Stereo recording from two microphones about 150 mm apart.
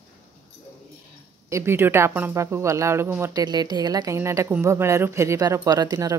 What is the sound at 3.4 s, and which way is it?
A woman's voice, 30° right (ahead or behind).